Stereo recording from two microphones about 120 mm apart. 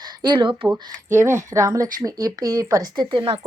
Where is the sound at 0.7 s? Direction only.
20° right (ahead or behind); by 3.2 s 40° right (ahead or behind).